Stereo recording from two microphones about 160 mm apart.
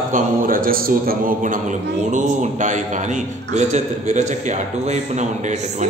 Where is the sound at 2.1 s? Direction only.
50° right (ahead or behind).